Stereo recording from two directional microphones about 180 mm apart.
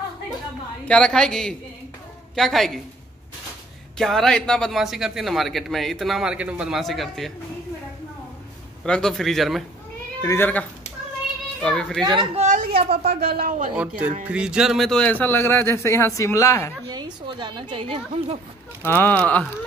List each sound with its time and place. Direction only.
0.8 s speech: 5° left (ahead or behind)
4.0 s speech: 5° left (ahead or behind)
8.8 s speech: 5° left (ahead or behind)
10.2 s speech: 10° left (ahead or behind)
12.2 s a woman's voice: 40° right (ahead or behind)
12.9 s speech: 60° right (ahead or behind)
13.7 s speech: 5° right (ahead or behind); by 16.7 s 15° left (ahead or behind)
16.9 s a woman's voice: 25° right (ahead or behind)
18.8 s speech: 10° left (ahead or behind)